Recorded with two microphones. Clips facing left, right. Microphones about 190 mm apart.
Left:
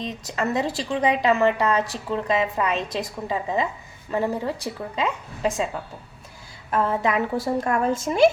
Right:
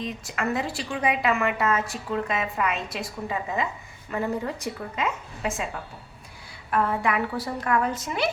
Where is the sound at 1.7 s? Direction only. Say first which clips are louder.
Left 3 dB; 35° left (ahead or behind).